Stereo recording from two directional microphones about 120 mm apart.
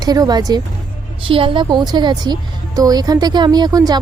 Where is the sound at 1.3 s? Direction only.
45° right (ahead or behind).